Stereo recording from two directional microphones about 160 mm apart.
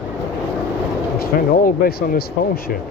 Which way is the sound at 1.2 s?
65° left (ahead or behind).